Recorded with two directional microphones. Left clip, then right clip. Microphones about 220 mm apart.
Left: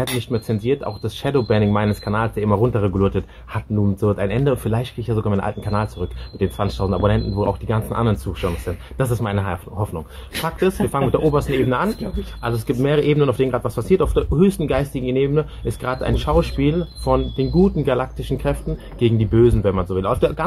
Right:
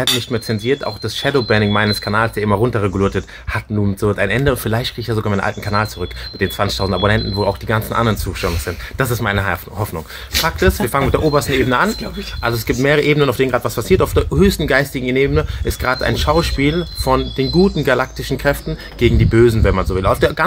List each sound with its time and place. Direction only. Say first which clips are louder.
0.0 s speech: right 6 dB; 10° right (ahead or behind)